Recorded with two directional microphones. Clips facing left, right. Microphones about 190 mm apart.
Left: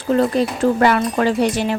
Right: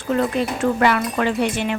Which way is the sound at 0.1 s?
35° left (ahead or behind).